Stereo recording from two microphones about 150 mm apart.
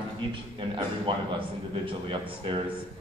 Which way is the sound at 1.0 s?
35° right (ahead or behind).